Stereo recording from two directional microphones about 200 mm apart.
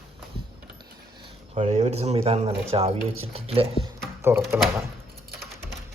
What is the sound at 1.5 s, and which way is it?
Speech, 30° right (ahead or behind).